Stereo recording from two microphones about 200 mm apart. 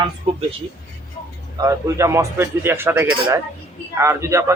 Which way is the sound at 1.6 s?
15° right (ahead or behind).